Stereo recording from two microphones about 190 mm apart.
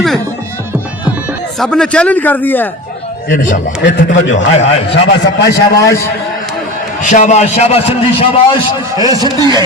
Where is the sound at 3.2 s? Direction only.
50° left (ahead or behind).